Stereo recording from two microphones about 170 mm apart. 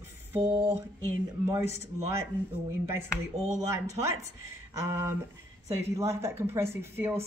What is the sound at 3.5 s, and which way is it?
Speech, 15° right (ahead or behind).